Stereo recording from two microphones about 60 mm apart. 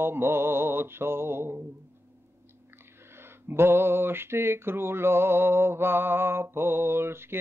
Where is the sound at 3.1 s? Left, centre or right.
Right.